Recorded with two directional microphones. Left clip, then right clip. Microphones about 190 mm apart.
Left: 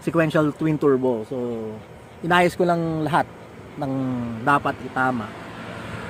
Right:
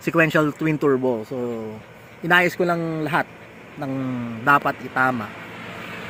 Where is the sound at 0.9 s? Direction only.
20° right (ahead or behind).